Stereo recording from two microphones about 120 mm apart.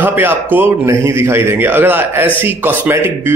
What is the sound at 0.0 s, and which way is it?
A man's voice, 15° right (ahead or behind).